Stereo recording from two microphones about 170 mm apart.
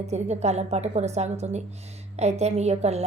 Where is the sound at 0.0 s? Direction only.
40° right (ahead or behind).